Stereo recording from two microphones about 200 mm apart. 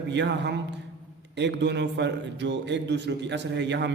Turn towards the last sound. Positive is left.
turn(degrees=-60)  # may be behind; listen again after turning